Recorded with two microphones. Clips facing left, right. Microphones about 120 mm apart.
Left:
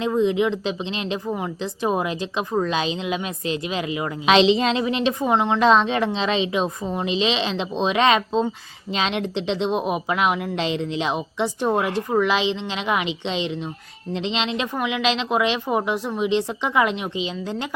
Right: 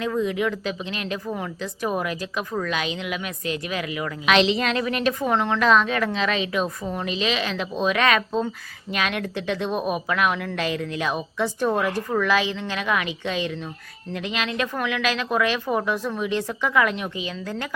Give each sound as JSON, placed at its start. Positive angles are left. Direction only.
{"t": 0.0, "sound": "a woman's voice", "side_deg": 25}